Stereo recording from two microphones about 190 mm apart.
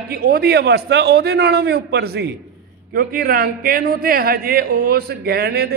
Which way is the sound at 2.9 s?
50° right (ahead or behind).